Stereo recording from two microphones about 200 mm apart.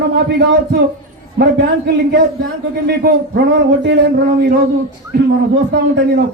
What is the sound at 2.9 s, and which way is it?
A man's voice, 50° right (ahead or behind).